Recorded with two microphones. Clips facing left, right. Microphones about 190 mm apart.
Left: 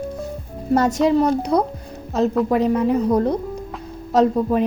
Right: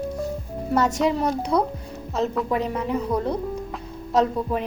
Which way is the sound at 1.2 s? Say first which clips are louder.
Left 4 dB; 40° left (ahead or behind).